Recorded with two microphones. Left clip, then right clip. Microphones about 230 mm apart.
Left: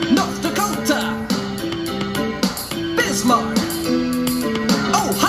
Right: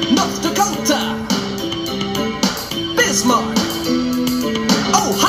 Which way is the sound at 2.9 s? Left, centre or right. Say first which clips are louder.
Right 2 dB; centre.